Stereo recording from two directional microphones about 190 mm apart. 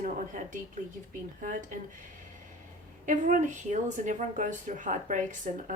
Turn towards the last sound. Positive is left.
turn(degrees=-40)  # may be behind; listen again after turning